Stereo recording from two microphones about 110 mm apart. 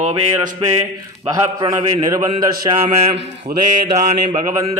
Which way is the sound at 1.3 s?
40° right (ahead or behind).